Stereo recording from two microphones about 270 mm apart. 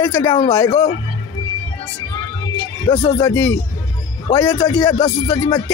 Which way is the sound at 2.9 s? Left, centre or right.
Centre.